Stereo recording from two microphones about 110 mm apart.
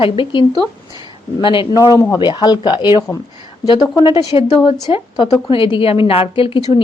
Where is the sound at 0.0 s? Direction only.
55° left (ahead or behind).